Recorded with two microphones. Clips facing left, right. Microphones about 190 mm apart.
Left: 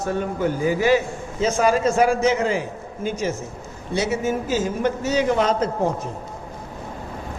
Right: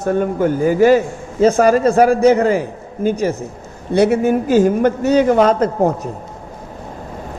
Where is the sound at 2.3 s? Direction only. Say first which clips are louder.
Right 8 dB; 55° right (ahead or behind).